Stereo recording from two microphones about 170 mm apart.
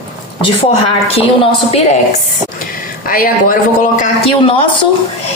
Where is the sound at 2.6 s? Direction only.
55° left (ahead or behind).